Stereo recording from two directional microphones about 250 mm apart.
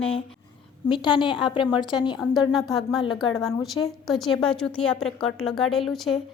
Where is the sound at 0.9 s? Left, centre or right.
Centre.